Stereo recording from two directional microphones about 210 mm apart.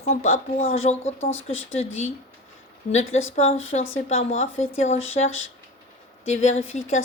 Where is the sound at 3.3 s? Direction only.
30° left (ahead or behind).